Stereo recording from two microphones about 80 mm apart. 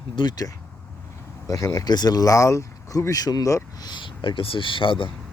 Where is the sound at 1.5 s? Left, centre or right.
Left.